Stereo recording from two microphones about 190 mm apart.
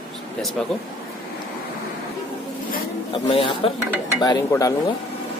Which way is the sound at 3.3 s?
30° left (ahead or behind).